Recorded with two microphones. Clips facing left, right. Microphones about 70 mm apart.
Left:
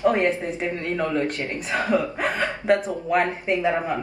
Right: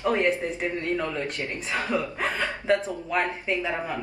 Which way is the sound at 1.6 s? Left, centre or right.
Left.